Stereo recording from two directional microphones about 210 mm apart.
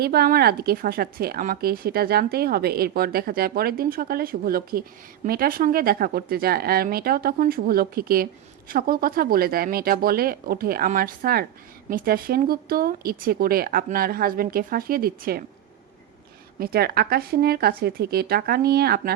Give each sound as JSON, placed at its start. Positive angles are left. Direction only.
{"t": 0.0, "sound": "a woman's voice", "side_deg": -45}
{"t": 16.6, "sound": "a woman's voice", "side_deg": -45}